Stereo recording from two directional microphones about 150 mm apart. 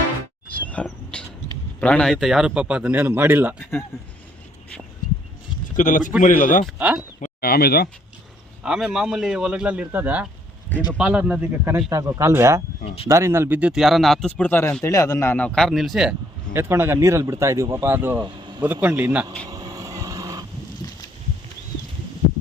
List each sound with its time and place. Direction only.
0.5 s wild animals: 10° left (ahead or behind)
1.1 s a sound: 5° left (ahead or behind)
1.8 s speech: 5° left (ahead or behind); by 3.5 s 15° right (ahead or behind)
5.7 s speech: 60° left (ahead or behind)
6.7 s speech: 10° right (ahead or behind)
7.2 s speech: 90° left
8.6 s speech: 5° right (ahead or behind)
16.5 s speech: 15° right (ahead or behind)
19.5 s vehicle: 25° right (ahead or behind)